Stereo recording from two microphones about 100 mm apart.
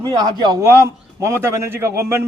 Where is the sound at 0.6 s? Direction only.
25° right (ahead or behind).